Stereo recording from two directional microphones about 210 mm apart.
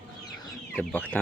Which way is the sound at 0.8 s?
10° left (ahead or behind).